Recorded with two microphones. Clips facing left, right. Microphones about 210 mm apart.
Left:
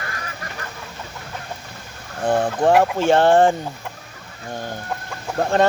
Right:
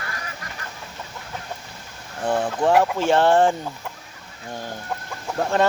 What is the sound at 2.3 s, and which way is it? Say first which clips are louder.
Speech: left 3 dB; 40° left (ahead or behind).